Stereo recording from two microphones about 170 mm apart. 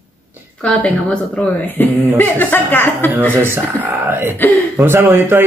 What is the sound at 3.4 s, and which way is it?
Speech, 10° right (ahead or behind).